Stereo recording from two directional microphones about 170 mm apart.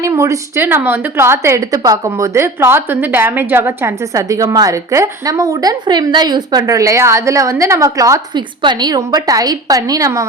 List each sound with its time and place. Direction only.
0.0 s a woman's voice: 15° right (ahead or behind)